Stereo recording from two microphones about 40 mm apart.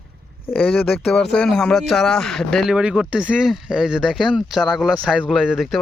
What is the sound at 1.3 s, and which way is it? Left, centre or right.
Speech, left.